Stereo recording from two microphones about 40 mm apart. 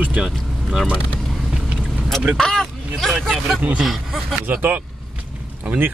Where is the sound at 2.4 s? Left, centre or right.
Centre.